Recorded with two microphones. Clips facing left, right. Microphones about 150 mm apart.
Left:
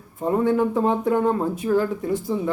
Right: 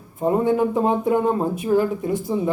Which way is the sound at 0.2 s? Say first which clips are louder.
Right 1 dB; 20° right (ahead or behind).